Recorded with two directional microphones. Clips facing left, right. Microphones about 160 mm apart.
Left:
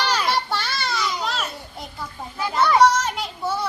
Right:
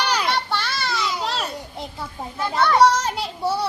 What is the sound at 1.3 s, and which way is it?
Children playing, 30° right (ahead or behind).